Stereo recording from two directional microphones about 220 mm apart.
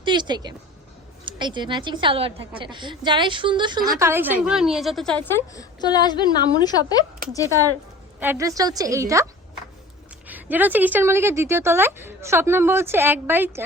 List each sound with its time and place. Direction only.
0.0 s a sound: 20° right (ahead or behind)
1.2 s a woman's voice: 20° right (ahead or behind); by 6.9 s 20° left (ahead or behind)
8.2 s a woman's voice: 10° right (ahead or behind)
10.2 s a woman's voice: 10° right (ahead or behind)